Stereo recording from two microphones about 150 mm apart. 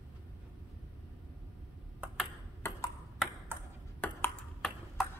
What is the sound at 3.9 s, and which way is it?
Ping, 10° left (ahead or behind).